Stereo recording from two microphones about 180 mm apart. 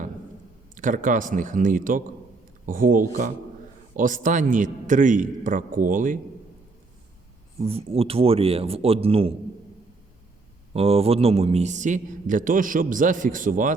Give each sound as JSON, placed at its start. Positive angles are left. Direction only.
{"t": 0.8, "sound": "a man's voice", "side_deg": -45}
{"t": 7.6, "sound": "a man's voice", "side_deg": -35}
{"t": 10.8, "sound": "a man's voice", "side_deg": -35}